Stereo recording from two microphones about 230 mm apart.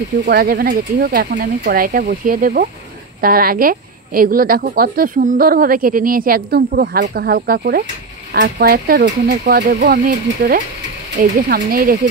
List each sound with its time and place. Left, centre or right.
0.2 s a woman's voice: right